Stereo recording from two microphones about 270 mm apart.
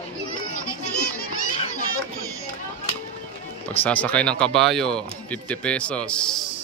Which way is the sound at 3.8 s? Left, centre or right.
Centre.